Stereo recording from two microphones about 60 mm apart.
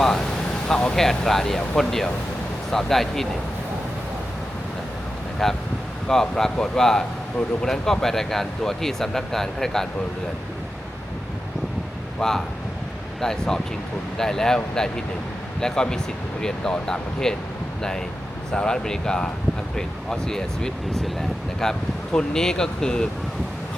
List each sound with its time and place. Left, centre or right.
0.0 s a sound: centre
0.7 s speech: centre
0.9 s speech: centre
5.4 s speech: centre
12.2 s speech: centre
18.5 s speech: centre